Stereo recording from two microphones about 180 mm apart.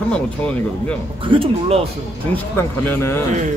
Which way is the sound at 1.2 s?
30° right (ahead or behind).